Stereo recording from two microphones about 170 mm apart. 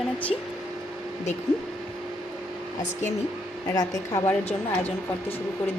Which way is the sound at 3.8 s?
20° left (ahead or behind).